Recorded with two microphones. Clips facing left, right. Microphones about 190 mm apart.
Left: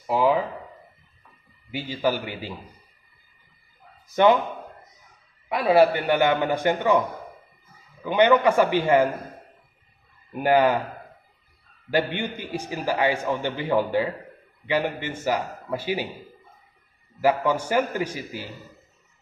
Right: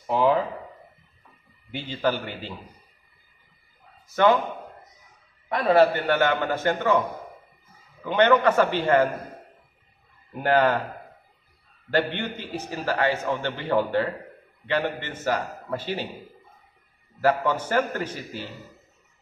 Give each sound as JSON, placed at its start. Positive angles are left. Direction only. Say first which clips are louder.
{"t": 0.0, "sound": "speech", "louder": "even", "side_deg": 5}
{"t": 1.7, "sound": "a man's voice", "louder": "left 1 dB", "side_deg": 10}
{"t": 4.1, "sound": "a man's voice", "louder": "left 2 dB", "side_deg": 15}
{"t": 5.5, "sound": "a man's voice", "louder": "left 1 dB", "side_deg": 10}
{"t": 8.0, "sound": "a man's voice", "louder": "left 1 dB", "side_deg": 10}
{"t": 10.3, "sound": "a man's voice", "louder": "left 2 dB", "side_deg": 10}
{"t": 11.9, "sound": "a man's voice", "louder": "left 1 dB", "side_deg": 10}
{"t": 17.2, "sound": "a man's voice", "louder": "left 1 dB", "side_deg": 10}